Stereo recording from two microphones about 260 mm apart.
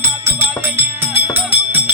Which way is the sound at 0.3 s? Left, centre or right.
Centre.